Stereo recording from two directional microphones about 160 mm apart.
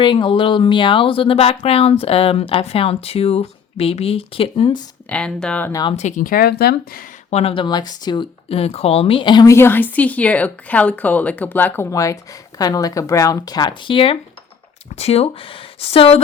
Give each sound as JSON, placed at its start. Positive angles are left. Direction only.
{"t": 0.0, "sound": "speech", "side_deg": 30}
{"t": 5.0, "sound": "speech", "side_deg": 5}
{"t": 5.7, "sound": "speech", "side_deg": 30}
{"t": 6.0, "sound": "speech", "side_deg": 50}
{"t": 7.3, "sound": "speech", "side_deg": 40}